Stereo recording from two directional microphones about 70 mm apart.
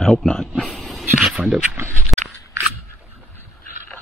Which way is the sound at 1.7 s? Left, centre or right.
Right.